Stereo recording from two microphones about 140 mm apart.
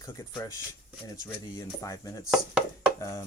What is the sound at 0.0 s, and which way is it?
Speech, 25° left (ahead or behind).